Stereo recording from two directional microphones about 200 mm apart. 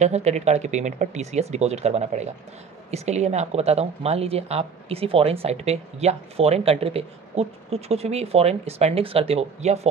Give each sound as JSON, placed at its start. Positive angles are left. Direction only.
{"t": 0.0, "sound": "speech", "side_deg": -35}